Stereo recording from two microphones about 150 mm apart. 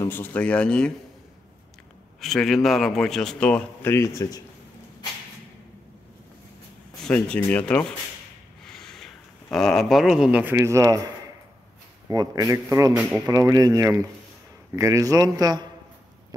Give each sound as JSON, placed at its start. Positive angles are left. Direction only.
{"t": 0.0, "sound": "speech", "side_deg": 15}
{"t": 2.1, "sound": "a man's voice", "side_deg": 0}
{"t": 7.1, "sound": "speech", "side_deg": 10}
{"t": 12.1, "sound": "a man's voice", "side_deg": -25}
{"t": 12.9, "sound": "speech", "side_deg": -5}
{"t": 13.3, "sound": "a man's voice", "side_deg": -25}